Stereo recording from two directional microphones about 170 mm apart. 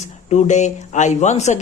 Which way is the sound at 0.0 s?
45° left (ahead or behind).